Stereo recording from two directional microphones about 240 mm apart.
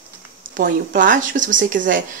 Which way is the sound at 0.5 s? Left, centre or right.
Right.